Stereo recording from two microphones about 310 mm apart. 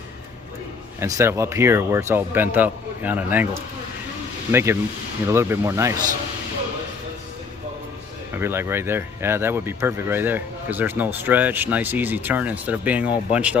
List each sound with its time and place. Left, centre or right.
0.9 s speech: centre
4.5 s speech: centre
8.3 s speech: centre